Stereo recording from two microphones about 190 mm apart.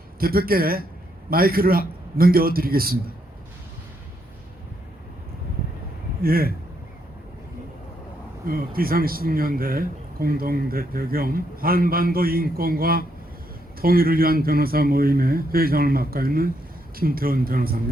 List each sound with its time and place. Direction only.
0.2 s speech: 50° right (ahead or behind)
6.2 s speech: 50° right (ahead or behind)
8.4 s speech: 50° right (ahead or behind)